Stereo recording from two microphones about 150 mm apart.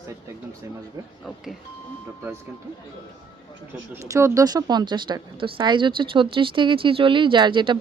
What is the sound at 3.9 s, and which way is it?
Speech, 20° right (ahead or behind).